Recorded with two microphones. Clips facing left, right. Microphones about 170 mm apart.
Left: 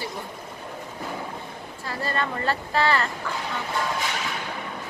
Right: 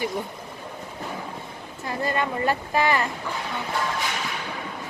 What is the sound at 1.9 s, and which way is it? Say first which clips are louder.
Speech: right 2 dB; 15° right (ahead or behind).